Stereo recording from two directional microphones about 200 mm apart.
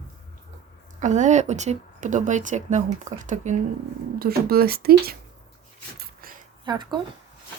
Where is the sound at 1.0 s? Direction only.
35° right (ahead or behind).